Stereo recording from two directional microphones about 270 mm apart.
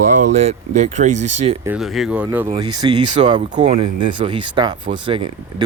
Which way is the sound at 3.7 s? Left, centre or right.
Right.